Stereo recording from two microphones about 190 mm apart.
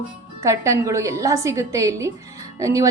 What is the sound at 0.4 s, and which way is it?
A woman's voice, 15° right (ahead or behind).